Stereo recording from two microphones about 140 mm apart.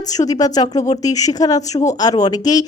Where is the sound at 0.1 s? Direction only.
25° left (ahead or behind).